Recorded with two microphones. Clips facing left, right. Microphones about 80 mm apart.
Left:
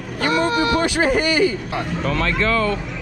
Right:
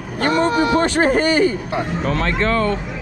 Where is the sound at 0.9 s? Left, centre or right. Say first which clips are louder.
Right 2 dB; right.